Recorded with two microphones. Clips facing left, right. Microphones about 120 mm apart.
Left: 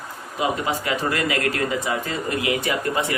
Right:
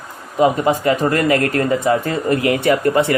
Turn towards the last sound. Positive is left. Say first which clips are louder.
# right 9 dB
turn(degrees=-60)  # may be behind; listen again after turning